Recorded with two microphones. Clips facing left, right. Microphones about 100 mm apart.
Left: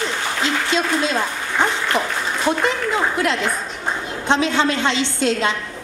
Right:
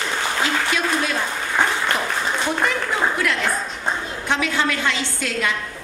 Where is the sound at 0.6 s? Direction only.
25° left (ahead or behind).